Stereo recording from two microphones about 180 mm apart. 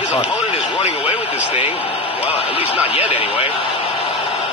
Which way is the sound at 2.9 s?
30° left (ahead or behind).